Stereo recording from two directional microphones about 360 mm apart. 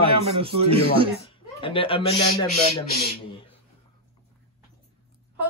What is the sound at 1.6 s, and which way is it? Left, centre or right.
Speech, centre.